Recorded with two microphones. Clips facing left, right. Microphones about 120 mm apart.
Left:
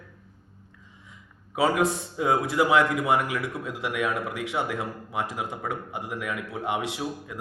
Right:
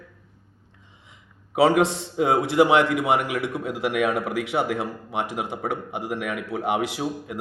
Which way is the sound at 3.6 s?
90° right.